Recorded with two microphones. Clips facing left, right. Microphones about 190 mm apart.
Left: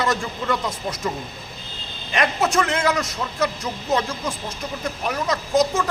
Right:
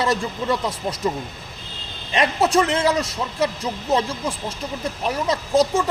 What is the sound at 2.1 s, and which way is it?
A man's voice, 30° right (ahead or behind).